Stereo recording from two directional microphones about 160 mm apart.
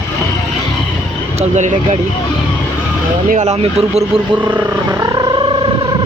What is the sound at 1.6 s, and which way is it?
Speech, 50° right (ahead or behind).